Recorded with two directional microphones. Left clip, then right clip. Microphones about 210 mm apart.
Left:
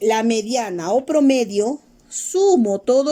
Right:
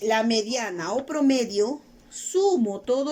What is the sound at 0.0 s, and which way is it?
A woman's voice, 45° left (ahead or behind).